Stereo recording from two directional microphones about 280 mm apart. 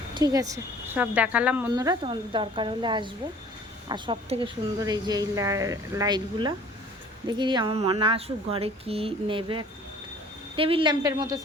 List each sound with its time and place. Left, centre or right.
0.1 s a woman's voice: centre